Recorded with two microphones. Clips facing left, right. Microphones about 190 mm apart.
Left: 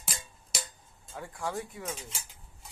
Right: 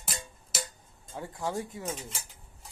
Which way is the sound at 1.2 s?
20° right (ahead or behind).